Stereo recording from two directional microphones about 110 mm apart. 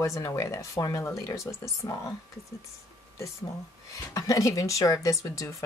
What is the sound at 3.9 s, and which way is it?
Speech, 30° left (ahead or behind).